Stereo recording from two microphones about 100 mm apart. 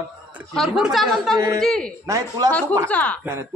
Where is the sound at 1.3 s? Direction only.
40° right (ahead or behind).